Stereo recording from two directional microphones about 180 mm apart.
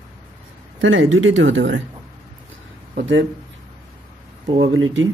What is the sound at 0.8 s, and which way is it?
Speech, 90° right.